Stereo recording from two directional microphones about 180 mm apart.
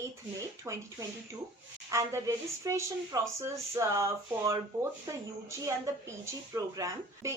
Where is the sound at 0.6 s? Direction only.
20° right (ahead or behind).